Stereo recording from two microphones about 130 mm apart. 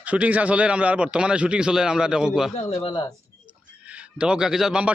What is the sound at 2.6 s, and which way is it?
Speech, 55° left (ahead or behind).